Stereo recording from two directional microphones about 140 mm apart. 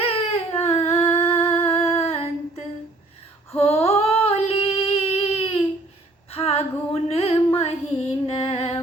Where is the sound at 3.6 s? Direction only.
50° left (ahead or behind).